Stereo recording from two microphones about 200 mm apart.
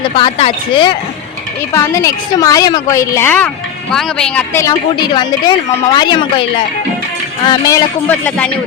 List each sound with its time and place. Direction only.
0.2 s a woman's voice: 25° left (ahead or behind)
1.7 s a woman's voice: 15° left (ahead or behind)
7.4 s a woman's voice: 20° left (ahead or behind)
8.0 s a woman's voice: 10° left (ahead or behind)